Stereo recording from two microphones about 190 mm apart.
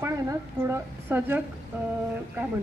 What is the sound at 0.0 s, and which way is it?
A woman's voice, 15° right (ahead or behind).